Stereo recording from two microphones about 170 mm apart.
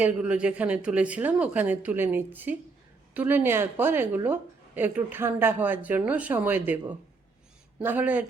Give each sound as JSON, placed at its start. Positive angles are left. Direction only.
{"t": 0.0, "sound": "a woman's voice", "side_deg": -10}